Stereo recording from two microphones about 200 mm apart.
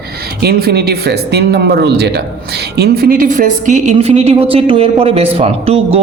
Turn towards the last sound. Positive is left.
turn(degrees=-30)  # may be behind; listen again after turning